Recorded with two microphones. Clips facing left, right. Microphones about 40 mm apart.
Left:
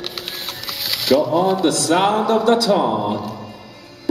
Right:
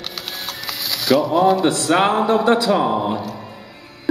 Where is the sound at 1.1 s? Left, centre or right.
Right.